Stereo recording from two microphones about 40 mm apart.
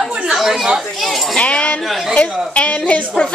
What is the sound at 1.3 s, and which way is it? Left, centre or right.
Speech, left.